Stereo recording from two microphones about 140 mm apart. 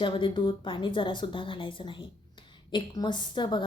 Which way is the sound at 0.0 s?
35° left (ahead or behind).